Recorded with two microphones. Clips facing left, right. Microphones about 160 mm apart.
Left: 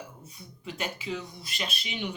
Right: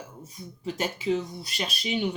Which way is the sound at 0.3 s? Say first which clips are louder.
Right 7 dB; 35° right (ahead or behind).